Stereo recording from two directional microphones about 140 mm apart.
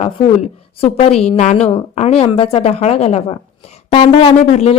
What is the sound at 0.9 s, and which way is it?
A woman's voice, 50° left (ahead or behind).